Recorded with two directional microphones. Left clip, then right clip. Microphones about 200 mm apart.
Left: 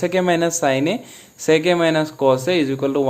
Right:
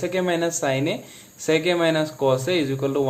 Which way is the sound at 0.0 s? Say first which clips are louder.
Left 5 dB; 30° left (ahead or behind).